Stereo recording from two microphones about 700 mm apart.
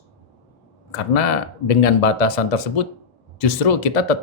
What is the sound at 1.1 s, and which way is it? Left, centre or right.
Speech, left.